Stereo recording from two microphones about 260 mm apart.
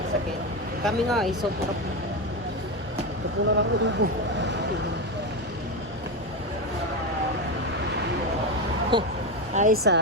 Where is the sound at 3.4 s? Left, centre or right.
Right.